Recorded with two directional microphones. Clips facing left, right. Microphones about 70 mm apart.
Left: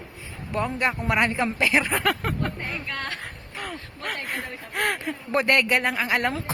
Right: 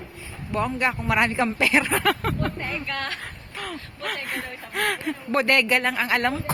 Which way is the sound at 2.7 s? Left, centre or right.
Left.